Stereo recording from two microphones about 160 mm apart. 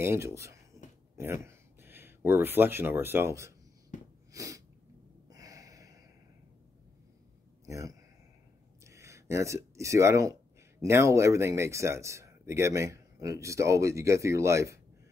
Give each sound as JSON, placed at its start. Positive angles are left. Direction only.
{"t": 0.0, "sound": "speech", "side_deg": -15}
{"t": 3.9, "sound": "wheeze", "side_deg": 50}
{"t": 4.3, "sound": "sneeze", "side_deg": -20}
{"t": 5.3, "sound": "gasp", "side_deg": -20}
{"t": 7.6, "sound": "a man's voice", "side_deg": -20}